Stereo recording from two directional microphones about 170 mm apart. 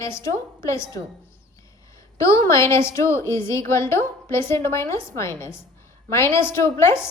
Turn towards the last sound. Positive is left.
turn(degrees=15)  # may be behind; listen again after turning